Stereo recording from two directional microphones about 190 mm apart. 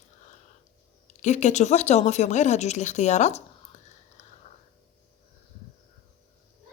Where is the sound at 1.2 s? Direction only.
40° left (ahead or behind).